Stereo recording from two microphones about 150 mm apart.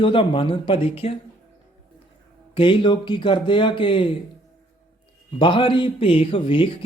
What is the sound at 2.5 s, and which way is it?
Speech, 35° left (ahead or behind).